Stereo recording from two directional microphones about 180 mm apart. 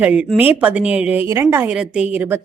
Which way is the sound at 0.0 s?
10° right (ahead or behind).